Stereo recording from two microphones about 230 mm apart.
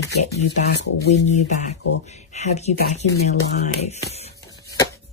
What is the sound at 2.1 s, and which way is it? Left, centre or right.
Speech, left.